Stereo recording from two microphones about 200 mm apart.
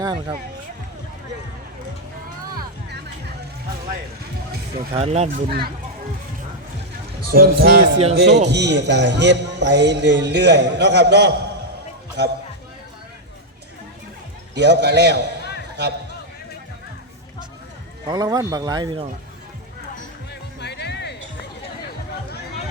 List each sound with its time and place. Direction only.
0.0 s speech: 20° right (ahead or behind)
2.6 s music: 55° right (ahead or behind)
4.9 s speech: 30° right (ahead or behind)
5.5 s a man's voice: 50° right (ahead or behind)
7.3 s a man's voice: 50° right (ahead or behind)
14.5 s a man's voice: 55° right (ahead or behind)
18.1 s speech: 20° right (ahead or behind)
20.6 s music: 60° left (ahead or behind)